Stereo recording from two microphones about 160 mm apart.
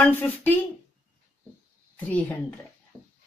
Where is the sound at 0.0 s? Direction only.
10° left (ahead or behind).